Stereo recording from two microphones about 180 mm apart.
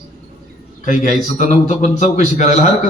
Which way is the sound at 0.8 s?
45° left (ahead or behind).